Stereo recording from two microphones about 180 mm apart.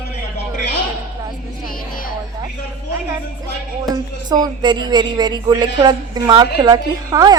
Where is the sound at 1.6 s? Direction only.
50° left (ahead or behind).